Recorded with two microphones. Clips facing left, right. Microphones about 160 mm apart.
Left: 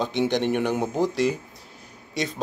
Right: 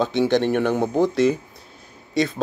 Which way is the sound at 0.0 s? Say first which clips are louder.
Right 4 dB; 15° left (ahead or behind).